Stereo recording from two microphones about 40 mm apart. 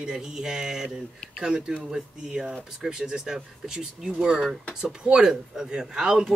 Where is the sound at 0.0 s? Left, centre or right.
Centre.